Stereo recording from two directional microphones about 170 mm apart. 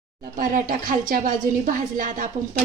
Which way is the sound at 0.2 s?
50° right (ahead or behind).